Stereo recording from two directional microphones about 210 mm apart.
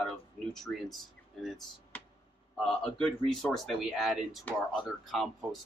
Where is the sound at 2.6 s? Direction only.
5° left (ahead or behind).